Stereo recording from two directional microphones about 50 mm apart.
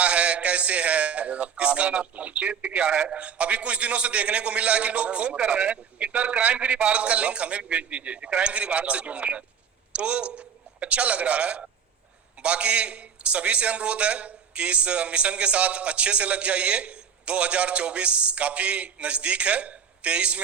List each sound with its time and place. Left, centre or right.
0.0 s a man's voice: right